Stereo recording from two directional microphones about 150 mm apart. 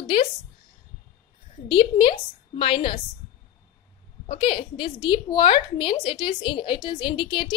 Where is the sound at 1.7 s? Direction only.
35° left (ahead or behind).